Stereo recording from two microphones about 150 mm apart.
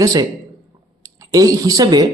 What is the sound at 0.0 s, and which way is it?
Speech, 25° right (ahead or behind).